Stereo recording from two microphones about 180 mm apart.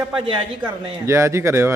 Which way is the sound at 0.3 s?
25° right (ahead or behind).